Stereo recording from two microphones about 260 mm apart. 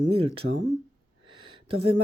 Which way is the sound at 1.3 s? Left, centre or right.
Centre.